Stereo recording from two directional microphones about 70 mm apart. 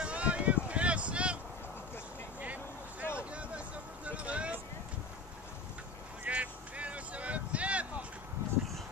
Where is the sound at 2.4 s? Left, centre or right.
Right.